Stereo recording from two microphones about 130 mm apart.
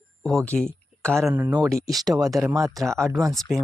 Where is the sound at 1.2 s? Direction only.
20° right (ahead or behind).